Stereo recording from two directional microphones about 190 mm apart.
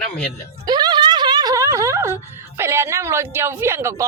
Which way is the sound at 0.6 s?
20° right (ahead or behind).